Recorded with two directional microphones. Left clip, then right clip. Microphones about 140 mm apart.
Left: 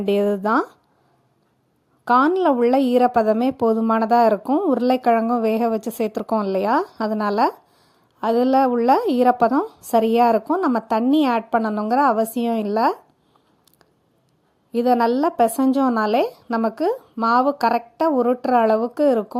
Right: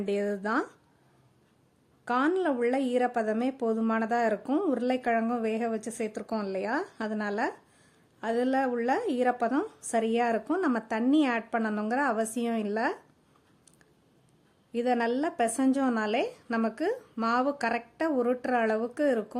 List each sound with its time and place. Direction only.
0.0 s speech: 45° left (ahead or behind)
2.0 s a woman's voice: 40° left (ahead or behind)
14.7 s a woman's voice: 40° left (ahead or behind)